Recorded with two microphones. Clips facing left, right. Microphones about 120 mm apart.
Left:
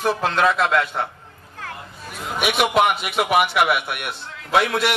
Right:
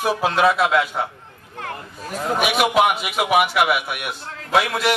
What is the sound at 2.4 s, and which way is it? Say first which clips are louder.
A man's voice: even; centre (ahead or behind).